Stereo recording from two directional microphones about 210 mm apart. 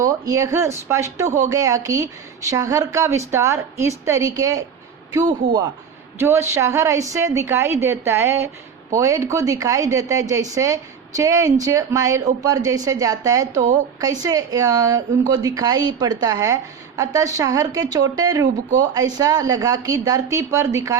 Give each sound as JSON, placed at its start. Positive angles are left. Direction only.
{"t": 0.0, "sound": "speech", "side_deg": -15}